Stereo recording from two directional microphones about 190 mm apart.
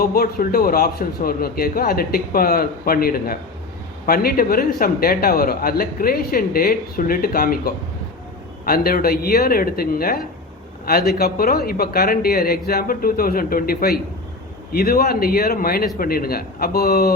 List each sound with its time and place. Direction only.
0.0 s a man's voice: 50° left (ahead or behind)